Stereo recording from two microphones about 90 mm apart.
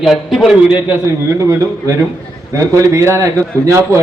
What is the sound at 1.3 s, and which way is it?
A man's voice, 35° right (ahead or behind).